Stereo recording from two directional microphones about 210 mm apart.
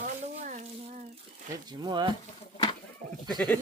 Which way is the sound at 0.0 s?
35° right (ahead or behind).